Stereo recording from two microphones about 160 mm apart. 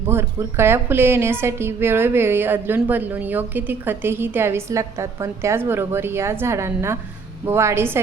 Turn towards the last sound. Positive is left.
turn(degrees=-15)  # may be behind; listen again after turning